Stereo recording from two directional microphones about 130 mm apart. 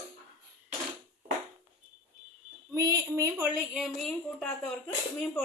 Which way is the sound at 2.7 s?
25° right (ahead or behind).